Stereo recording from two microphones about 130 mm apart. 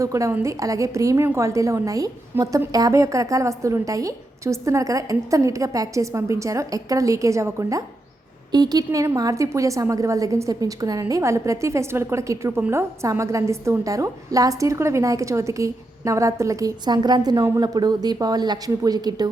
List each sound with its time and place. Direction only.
0.0 s a woman's voice: 25° right (ahead or behind)